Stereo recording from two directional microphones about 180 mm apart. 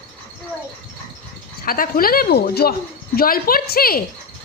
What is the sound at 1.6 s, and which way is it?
A woman's voice, 55° left (ahead or behind).